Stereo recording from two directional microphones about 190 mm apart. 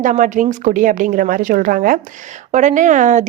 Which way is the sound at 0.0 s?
40° right (ahead or behind).